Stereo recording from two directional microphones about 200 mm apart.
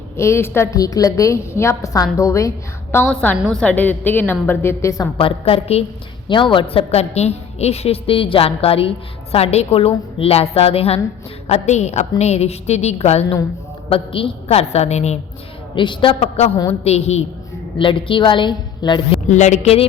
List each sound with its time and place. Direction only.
0.2 s a woman's voice: 15° left (ahead or behind)
5.1 s a woman's voice: 30° left (ahead or behind)
15.7 s a woman's voice: 25° left (ahead or behind)
19.3 s a woman's voice: 35° left (ahead or behind)